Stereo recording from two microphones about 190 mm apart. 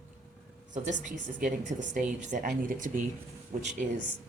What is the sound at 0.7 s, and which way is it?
A woman's voice, 40° right (ahead or behind).